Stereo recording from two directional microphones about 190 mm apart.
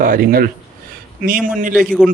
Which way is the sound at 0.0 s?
50° right (ahead or behind).